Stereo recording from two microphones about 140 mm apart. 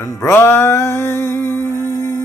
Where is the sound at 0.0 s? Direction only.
20° left (ahead or behind).